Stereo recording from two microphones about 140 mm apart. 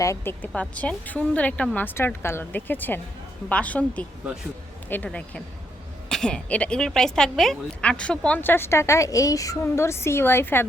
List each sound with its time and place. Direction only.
0.0 s a woman's voice: 20° left (ahead or behind)
0.5 s speech: 10° left (ahead or behind)